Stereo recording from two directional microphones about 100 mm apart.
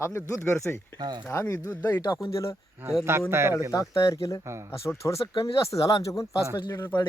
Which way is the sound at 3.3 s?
25° right (ahead or behind).